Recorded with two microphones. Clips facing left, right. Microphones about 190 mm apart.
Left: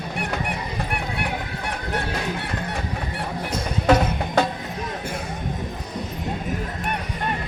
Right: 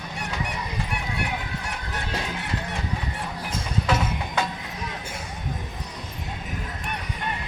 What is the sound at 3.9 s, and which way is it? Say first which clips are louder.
Music: left 9 dB; 50° left (ahead or behind).